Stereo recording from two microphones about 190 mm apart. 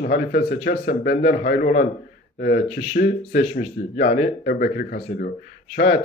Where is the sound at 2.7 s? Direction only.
40° left (ahead or behind).